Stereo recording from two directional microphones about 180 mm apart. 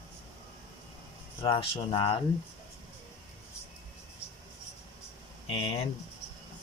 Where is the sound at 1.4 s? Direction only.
30° left (ahead or behind).